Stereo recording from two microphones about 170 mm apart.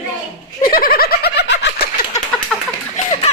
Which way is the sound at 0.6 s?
55° left (ahead or behind).